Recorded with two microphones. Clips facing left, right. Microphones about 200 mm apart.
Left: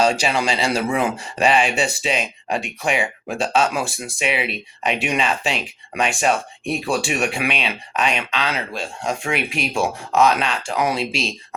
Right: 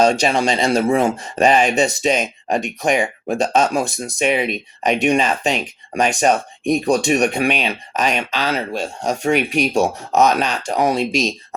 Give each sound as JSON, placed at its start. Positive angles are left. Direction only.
{"t": 0.0, "sound": "speech", "side_deg": -40}